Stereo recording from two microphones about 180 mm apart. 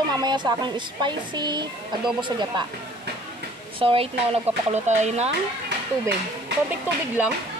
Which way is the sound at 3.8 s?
30° right (ahead or behind).